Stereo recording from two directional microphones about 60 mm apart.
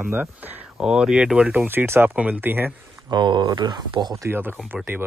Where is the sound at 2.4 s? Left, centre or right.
Right.